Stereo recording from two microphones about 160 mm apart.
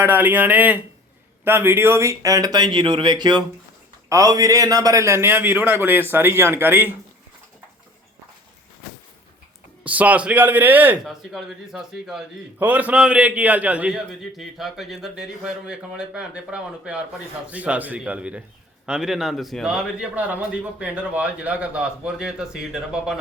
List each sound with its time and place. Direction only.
0.0 s a man's voice: 10° right (ahead or behind)
9.8 s a man's voice: 10° right (ahead or behind)